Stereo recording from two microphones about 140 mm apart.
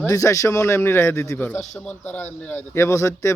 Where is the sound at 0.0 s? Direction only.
20° left (ahead or behind).